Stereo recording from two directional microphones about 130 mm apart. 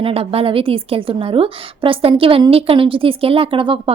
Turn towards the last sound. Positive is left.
turn(degrees=-40)  # may be behind; listen again after turning